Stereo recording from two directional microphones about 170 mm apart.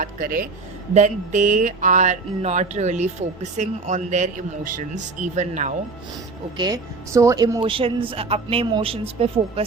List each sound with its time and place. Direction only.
0.0 s speech: 60° right (ahead or behind)
0.9 s a sound: 45° right (ahead or behind)
6.6 s a woman's voice: 20° right (ahead or behind)